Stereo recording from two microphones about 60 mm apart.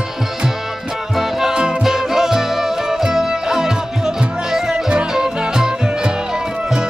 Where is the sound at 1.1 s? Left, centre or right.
Centre.